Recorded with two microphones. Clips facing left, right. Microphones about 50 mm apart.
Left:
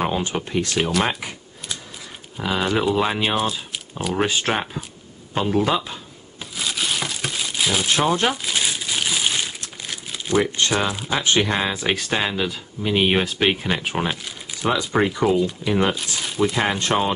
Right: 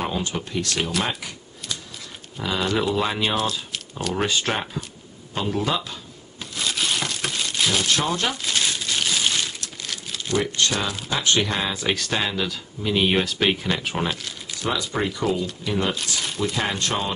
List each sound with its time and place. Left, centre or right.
0.0 s speech: left
1.0 s a sound: centre
2.5 s speech: centre
6.4 s crumpling: centre
7.9 s crumpling: centre
9.8 s speech: centre
16.2 s crumpling: centre
16.5 s speech: centre